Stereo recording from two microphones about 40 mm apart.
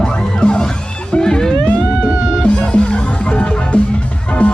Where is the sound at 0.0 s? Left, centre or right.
Left.